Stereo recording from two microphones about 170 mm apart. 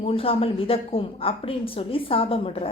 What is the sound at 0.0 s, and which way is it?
A woman's voice, 35° left (ahead or behind).